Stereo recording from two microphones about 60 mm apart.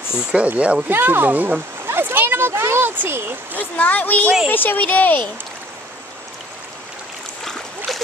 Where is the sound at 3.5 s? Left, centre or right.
Left.